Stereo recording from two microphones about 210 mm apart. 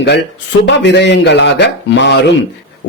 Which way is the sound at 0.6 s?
55° left (ahead or behind).